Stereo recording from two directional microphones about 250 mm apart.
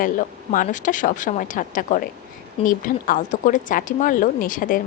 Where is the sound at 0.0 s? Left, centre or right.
Left.